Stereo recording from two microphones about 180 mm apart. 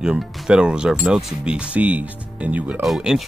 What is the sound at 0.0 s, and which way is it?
Speech, centre (ahead or behind).